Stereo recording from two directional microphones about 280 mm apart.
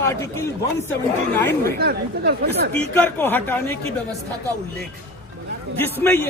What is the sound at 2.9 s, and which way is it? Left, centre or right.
Speech, centre.